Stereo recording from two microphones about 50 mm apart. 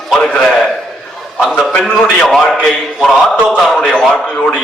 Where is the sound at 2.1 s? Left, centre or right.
Centre.